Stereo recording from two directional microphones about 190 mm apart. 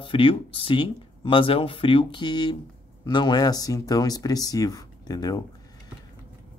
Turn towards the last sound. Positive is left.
turn(degrees=20)  # may be behind; listen again after turning